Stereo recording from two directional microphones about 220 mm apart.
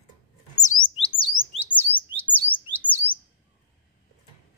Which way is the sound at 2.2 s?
5° left (ahead or behind).